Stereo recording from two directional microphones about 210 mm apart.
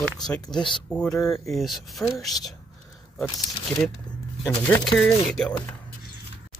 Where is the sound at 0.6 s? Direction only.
20° left (ahead or behind).